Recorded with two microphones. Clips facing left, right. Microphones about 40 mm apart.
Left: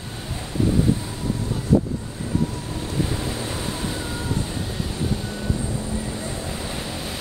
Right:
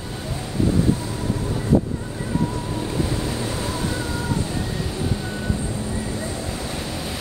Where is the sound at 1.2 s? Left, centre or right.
Right.